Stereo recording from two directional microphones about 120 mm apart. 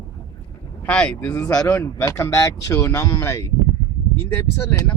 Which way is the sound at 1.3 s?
30° left (ahead or behind).